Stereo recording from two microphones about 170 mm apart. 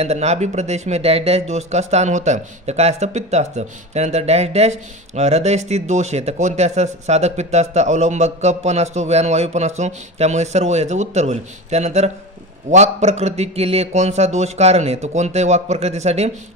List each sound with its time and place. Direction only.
0.0 s speech: 40° right (ahead or behind)